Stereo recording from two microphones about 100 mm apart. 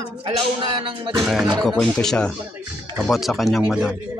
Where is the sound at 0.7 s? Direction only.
55° right (ahead or behind).